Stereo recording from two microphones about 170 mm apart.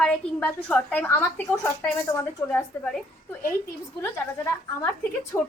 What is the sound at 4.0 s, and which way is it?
Speech, 15° left (ahead or behind).